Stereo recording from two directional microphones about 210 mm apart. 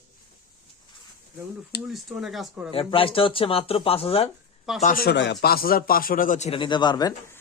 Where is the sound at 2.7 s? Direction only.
25° left (ahead or behind).